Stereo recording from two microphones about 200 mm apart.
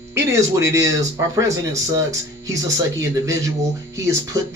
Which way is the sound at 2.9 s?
15° right (ahead or behind).